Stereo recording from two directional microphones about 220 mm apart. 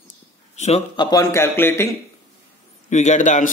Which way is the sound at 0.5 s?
30° left (ahead or behind).